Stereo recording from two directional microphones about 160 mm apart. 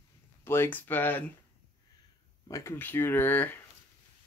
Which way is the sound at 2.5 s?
20° left (ahead or behind).